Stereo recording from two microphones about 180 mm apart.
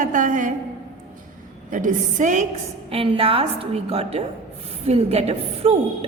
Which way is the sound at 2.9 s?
30° right (ahead or behind).